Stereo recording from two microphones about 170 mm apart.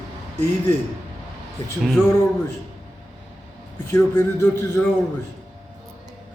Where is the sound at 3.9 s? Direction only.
20° left (ahead or behind).